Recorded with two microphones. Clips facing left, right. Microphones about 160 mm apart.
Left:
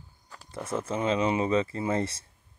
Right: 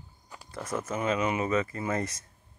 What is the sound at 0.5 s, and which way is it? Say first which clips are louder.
Speech: left 2 dB; 25° left (ahead or behind).